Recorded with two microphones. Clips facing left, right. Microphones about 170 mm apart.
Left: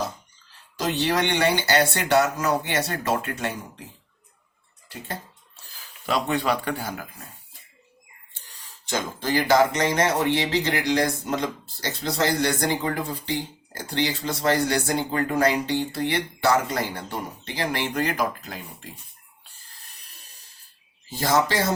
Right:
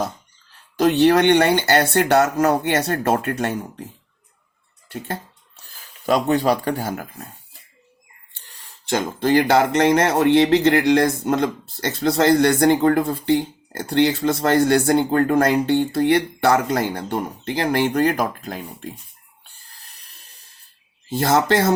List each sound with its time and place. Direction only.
0.8 s speech: 55° right (ahead or behind)
5.7 s speech: 45° right (ahead or behind)
8.8 s speech: 60° right (ahead or behind)
21.1 s speech: 55° right (ahead or behind)